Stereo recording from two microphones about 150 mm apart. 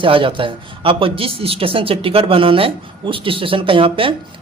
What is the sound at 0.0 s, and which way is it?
A man's voice, 35° right (ahead or behind).